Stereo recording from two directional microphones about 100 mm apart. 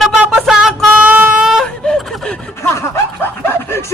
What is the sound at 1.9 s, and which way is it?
Snicker, 10° left (ahead or behind).